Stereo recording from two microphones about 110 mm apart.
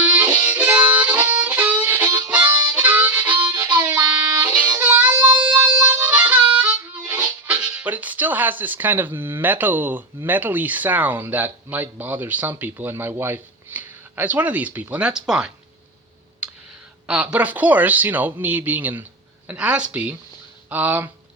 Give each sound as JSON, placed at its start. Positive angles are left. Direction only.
{"t": 0.0, "sound": "harmonica", "side_deg": -15}
{"t": 3.7, "sound": "music", "side_deg": -15}
{"t": 5.9, "sound": "harmonica", "side_deg": -15}
{"t": 7.1, "sound": "speech", "side_deg": -15}
{"t": 17.1, "sound": "speech", "side_deg": -15}